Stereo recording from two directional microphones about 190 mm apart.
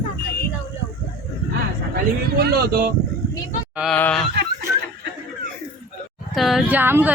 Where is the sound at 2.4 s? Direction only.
55° right (ahead or behind).